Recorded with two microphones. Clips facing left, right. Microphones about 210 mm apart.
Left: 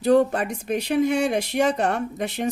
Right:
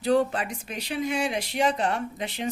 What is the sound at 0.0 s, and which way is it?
Speech, 45° left (ahead or behind).